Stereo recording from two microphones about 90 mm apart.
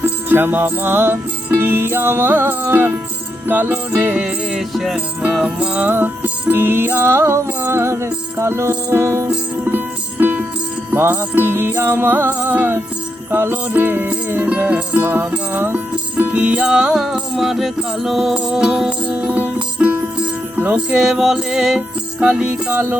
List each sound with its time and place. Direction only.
0.0 s music: 20° right (ahead or behind); by 5.5 s 5° right (ahead or behind)
5.5 s music: 15° right (ahead or behind)
20.6 s speech: 20° right (ahead or behind)
20.9 s music: 5° right (ahead or behind)